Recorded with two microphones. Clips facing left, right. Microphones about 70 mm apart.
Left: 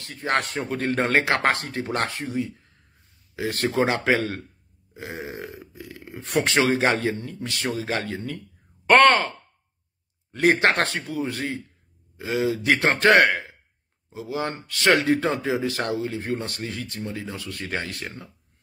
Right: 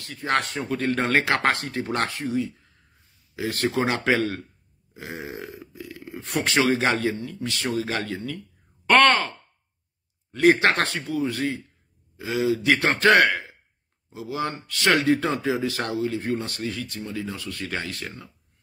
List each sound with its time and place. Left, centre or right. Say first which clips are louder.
0.0 s speech: even; left
10.3 s speech: right 1 dB; left